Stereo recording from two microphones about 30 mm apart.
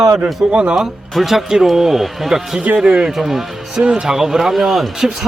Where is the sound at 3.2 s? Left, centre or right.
Centre.